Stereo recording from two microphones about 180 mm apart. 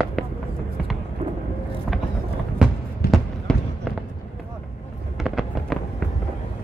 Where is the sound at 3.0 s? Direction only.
60° left (ahead or behind).